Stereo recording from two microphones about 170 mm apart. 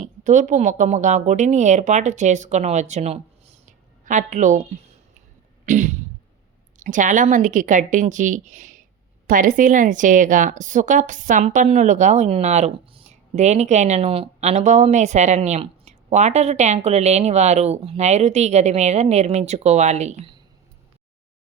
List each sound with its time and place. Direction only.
0.0 s speech: 45° right (ahead or behind)
5.6 s a sound: 45° right (ahead or behind)
6.7 s a woman's voice: 45° right (ahead or behind)